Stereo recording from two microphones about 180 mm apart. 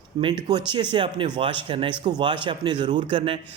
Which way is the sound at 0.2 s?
30° right (ahead or behind).